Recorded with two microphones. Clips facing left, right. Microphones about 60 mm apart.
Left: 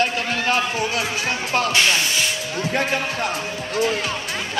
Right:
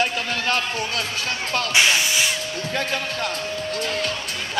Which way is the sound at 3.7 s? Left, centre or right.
Centre.